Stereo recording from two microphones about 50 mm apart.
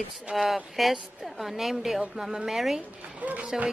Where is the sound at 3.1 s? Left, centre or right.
Right.